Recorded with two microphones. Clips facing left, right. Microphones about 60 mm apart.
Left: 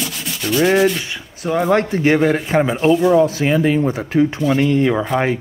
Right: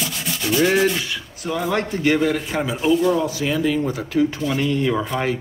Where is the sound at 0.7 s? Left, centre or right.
Centre.